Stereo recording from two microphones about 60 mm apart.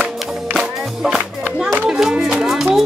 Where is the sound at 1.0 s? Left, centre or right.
Centre.